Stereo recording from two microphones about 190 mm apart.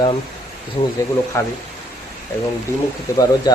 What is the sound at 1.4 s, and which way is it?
Speech, 10° left (ahead or behind).